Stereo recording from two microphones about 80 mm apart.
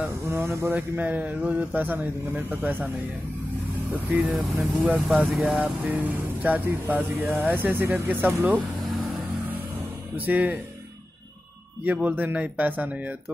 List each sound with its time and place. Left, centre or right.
0.0 s a sound: right
0.7 s speech: right
4.7 s speech: centre
5.0 s speech: centre; by 7.8 s right
7.8 s speech: right
10.1 s speech: centre
11.8 s speech: centre